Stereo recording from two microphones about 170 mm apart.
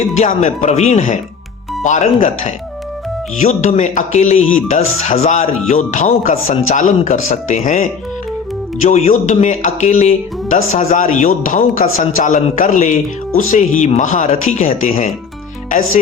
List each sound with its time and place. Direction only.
0.2 s speech: 45° left (ahead or behind)